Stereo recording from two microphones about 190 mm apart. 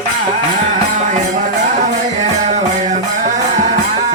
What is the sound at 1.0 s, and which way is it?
Music, 40° right (ahead or behind).